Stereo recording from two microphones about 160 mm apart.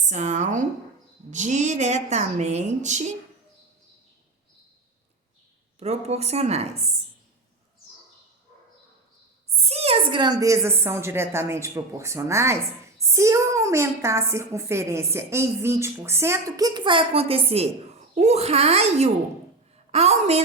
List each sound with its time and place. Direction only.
0.1 s a woman's voice: 45° right (ahead or behind)
5.8 s a woman's voice: 40° right (ahead or behind)
9.5 s a woman's voice: 40° right (ahead or behind)